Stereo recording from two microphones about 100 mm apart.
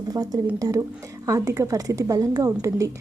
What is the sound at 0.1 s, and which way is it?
A woman's voice, 40° right (ahead or behind).